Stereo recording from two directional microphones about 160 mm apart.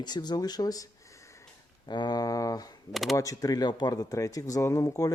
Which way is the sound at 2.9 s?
Centre (ahead or behind).